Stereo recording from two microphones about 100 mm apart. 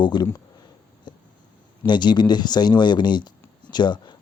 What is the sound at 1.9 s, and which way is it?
Speech, 50° left (ahead or behind).